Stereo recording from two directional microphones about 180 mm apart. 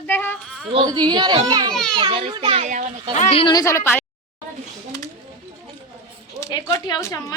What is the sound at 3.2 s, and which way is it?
Speech, 30° left (ahead or behind).